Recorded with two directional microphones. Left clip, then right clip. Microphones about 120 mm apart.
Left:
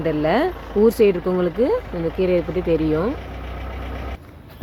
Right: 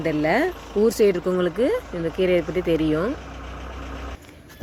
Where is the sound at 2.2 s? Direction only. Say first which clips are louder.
Even; 15° right (ahead or behind).